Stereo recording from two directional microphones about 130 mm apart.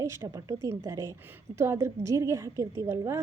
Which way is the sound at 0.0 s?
25° right (ahead or behind).